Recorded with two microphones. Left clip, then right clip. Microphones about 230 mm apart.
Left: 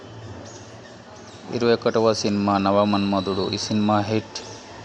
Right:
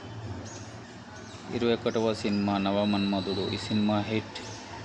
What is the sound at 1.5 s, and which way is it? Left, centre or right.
A man's voice, left.